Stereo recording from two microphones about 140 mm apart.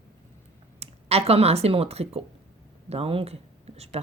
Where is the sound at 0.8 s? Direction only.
45° right (ahead or behind).